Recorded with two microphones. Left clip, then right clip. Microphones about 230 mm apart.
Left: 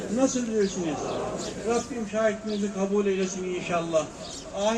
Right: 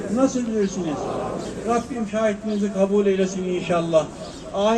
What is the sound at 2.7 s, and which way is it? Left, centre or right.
Speech, right.